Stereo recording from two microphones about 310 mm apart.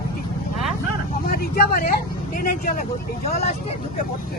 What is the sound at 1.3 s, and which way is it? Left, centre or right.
Speech, left.